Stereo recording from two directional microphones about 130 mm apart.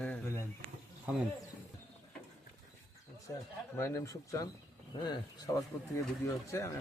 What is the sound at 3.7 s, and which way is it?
Speech, 20° left (ahead or behind).